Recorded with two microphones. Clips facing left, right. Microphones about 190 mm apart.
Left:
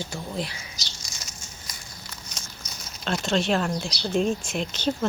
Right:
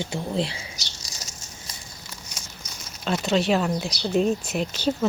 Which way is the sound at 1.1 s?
35° right (ahead or behind).